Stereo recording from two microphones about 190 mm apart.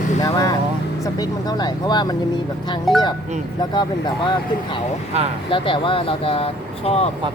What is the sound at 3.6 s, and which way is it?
Speech, 25° left (ahead or behind).